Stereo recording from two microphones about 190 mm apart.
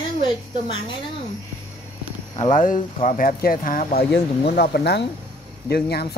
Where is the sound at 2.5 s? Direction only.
45° left (ahead or behind).